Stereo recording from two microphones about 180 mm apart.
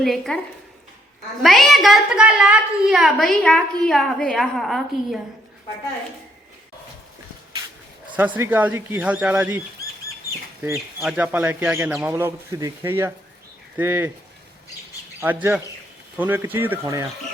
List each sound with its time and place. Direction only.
0.0 s a woman's voice: centre (ahead or behind)
1.4 s a woman's voice: centre (ahead or behind)
8.1 s speech: 10° right (ahead or behind)
10.6 s speech: 10° right (ahead or behind)
15.2 s speech: 10° right (ahead or behind)